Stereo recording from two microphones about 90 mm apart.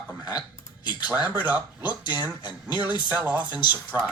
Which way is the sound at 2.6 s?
55° left (ahead or behind).